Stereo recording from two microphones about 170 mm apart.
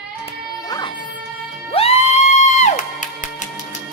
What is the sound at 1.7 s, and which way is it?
Music, 35° left (ahead or behind).